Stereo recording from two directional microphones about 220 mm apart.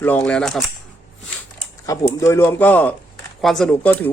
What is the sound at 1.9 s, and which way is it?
Speech, 15° left (ahead or behind).